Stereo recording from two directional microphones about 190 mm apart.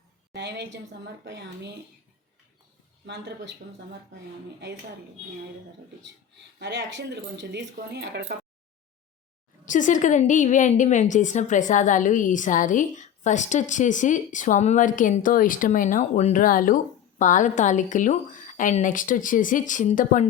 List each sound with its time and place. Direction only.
0.3 s speech: 65° right (ahead or behind)
3.1 s speech: 65° right (ahead or behind)
6.1 s speech: 65° right (ahead or behind)
9.6 s a woman's voice: 40° left (ahead or behind)